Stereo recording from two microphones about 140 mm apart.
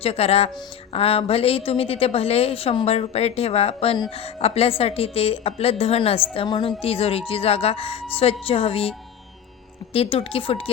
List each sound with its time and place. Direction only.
0.0 s a woman's voice: 45° left (ahead or behind)
9.9 s a woman's voice: 45° left (ahead or behind)